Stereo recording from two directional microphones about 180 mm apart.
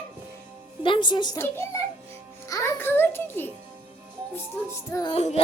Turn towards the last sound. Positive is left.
turn(degrees=35)  # may be behind; listen again after turning